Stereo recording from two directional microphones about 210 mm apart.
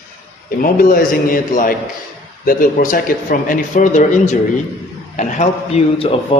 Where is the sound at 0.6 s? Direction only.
40° left (ahead or behind).